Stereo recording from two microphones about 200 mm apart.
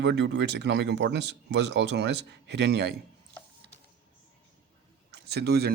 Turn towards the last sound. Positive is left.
turn(degrees=-55)  # may be behind; listen again after turning